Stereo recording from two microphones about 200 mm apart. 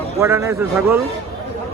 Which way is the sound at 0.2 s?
15° right (ahead or behind).